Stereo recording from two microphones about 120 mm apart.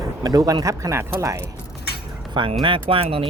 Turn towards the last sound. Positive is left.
turn(degrees=-50)  # may be behind; listen again after turning